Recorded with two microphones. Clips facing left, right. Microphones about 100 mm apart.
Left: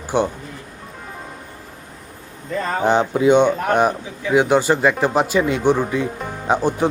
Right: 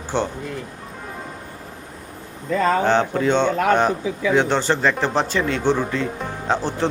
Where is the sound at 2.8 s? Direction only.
15° left (ahead or behind).